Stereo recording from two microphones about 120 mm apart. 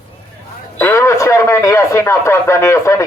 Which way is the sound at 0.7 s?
20° left (ahead or behind).